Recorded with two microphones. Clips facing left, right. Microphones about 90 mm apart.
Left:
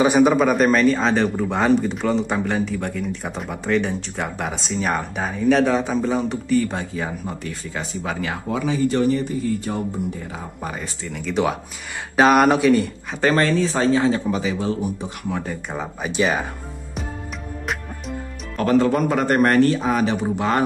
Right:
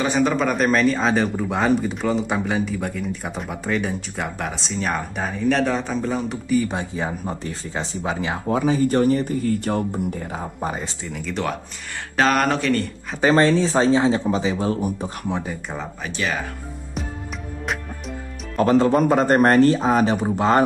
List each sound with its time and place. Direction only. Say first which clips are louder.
0.0 s a man's voice: left 5 dB; 10° left (ahead or behind); by 6.7 s 5° right (ahead or behind)
6.7 s speech: right 1 dB; 20° right (ahead or behind)
7.2 s speech: right 1 dB; 30° right (ahead or behind)
8.5 s speech: right 2 dB; 40° right (ahead or behind)
10.3 s speech: right 3 dB; 30° right (ahead or behind)
11.1 s a man's voice: left 5 dB; centre (ahead or behind)
13.3 s speech: right 3 dB; 25° right (ahead or behind)
14.7 s speech: right 1 dB; 40° right (ahead or behind)
15.3 s speech: even; 25° right (ahead or behind)
15.7 s speech: left 3 dB; 10° left (ahead or behind)
18.6 s speech: right 1 dB; 30° right (ahead or behind)